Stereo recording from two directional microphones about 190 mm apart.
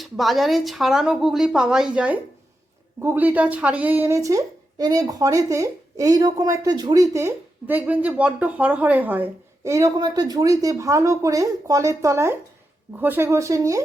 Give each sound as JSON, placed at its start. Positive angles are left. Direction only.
{"t": 0.0, "sound": "a woman's voice", "side_deg": 0}